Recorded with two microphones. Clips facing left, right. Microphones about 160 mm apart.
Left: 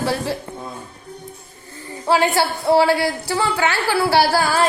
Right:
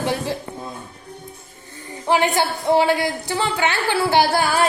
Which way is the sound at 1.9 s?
20° right (ahead or behind).